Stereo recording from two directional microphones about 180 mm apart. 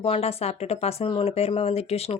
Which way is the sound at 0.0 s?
35° left (ahead or behind).